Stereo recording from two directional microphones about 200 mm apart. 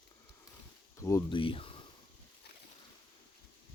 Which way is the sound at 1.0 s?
15° left (ahead or behind).